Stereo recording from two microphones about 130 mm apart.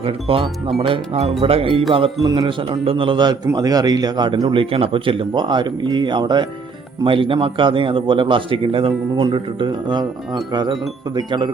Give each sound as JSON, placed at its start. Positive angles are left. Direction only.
{"t": 0.0, "sound": "a man's voice", "side_deg": -45}